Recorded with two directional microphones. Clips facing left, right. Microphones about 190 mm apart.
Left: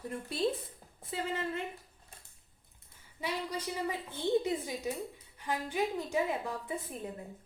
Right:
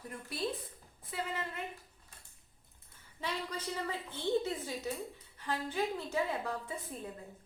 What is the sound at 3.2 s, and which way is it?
A woman's voice, 10° left (ahead or behind).